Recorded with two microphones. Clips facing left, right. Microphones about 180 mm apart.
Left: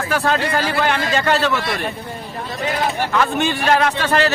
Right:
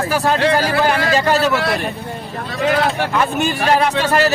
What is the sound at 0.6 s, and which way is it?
Speech, 35° right (ahead or behind).